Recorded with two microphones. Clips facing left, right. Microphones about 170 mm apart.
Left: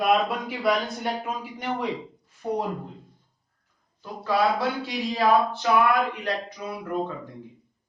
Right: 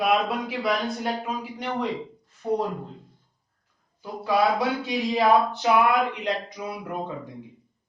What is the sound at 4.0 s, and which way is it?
Speech, 15° right (ahead or behind).